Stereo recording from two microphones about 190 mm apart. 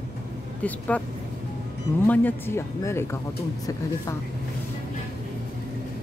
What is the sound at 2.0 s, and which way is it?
Speech, 10° left (ahead or behind).